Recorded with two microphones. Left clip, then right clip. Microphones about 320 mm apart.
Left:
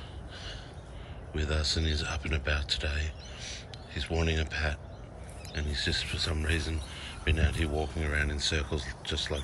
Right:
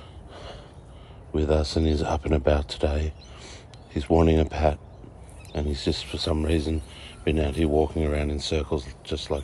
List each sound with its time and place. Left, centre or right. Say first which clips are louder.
1.3 s speech: right 8 dB; centre